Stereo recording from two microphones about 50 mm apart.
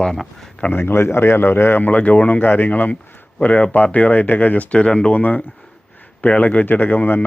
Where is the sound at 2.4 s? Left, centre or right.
Left.